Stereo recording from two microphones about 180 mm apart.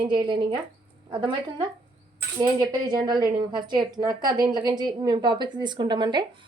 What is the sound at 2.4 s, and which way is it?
A woman's voice, 25° right (ahead or behind).